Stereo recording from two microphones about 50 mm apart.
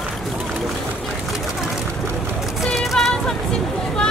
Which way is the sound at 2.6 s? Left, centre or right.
Centre.